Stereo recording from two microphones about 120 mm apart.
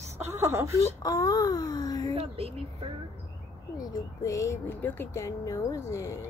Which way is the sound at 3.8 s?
25° left (ahead or behind).